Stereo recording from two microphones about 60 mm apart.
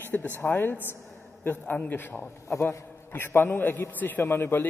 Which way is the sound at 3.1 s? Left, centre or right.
Left.